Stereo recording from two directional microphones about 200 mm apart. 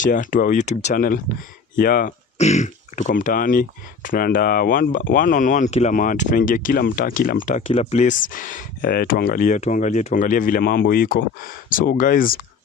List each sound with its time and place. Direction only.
0.0 s speech: 40° left (ahead or behind)